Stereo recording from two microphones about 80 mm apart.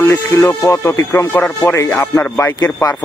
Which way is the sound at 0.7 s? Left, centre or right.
Left.